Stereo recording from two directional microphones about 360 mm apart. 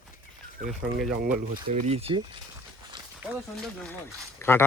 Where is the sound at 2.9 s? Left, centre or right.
Centre.